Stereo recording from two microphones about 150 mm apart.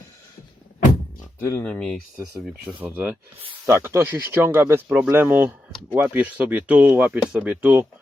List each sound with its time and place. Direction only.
1.4 s speech: 15° left (ahead or behind)
2.1 s speech: 20° right (ahead or behind)
2.6 s speech: 10° right (ahead or behind)